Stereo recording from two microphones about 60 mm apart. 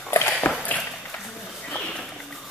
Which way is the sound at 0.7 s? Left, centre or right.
Left.